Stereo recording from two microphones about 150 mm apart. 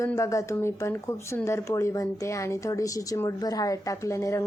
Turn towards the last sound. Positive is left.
turn(degrees=20)  # may be behind; listen again after turning